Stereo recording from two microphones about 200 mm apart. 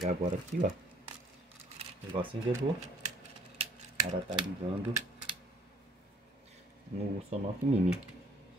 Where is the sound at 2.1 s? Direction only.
25° right (ahead or behind).